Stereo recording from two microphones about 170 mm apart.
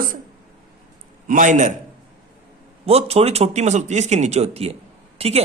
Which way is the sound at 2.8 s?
35° right (ahead or behind).